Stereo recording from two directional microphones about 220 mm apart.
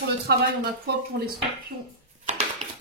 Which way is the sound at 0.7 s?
50° right (ahead or behind).